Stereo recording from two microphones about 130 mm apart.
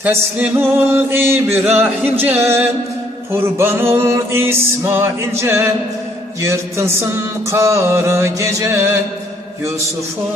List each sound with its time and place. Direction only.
0.0 s music: 10° right (ahead or behind)
3.6 s mantra: 20° right (ahead or behind)